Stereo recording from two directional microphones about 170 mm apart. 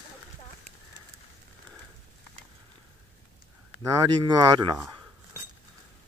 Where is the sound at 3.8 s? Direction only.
20° right (ahead or behind).